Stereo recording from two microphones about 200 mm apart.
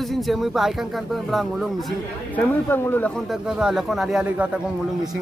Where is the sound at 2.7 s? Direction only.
10° left (ahead or behind).